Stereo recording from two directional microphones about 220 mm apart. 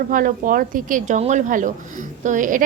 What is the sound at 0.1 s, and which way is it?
Speech, 40° right (ahead or behind).